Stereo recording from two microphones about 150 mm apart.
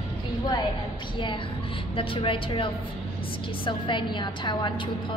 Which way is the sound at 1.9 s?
35° left (ahead or behind).